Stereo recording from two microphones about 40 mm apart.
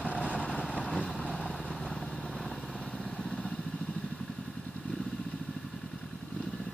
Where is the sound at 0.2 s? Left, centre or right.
Left.